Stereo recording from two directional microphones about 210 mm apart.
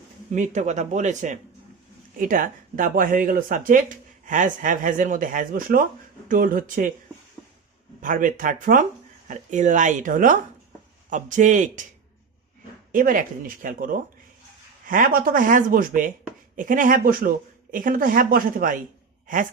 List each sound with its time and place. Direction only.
0.3 s speech: 35° right (ahead or behind)
8.0 s speech: 40° right (ahead or behind)
12.9 s speech: 40° right (ahead or behind)